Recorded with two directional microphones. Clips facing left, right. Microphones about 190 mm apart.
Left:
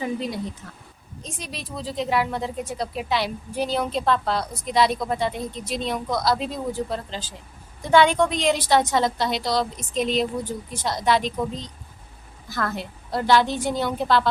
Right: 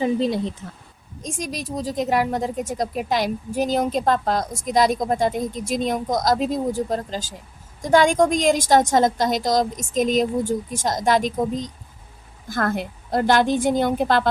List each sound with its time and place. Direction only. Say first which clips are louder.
0.0 s speech: right 6 dB; 25° right (ahead or behind)
1.2 s a woman's voice: right 7 dB; 45° right (ahead or behind)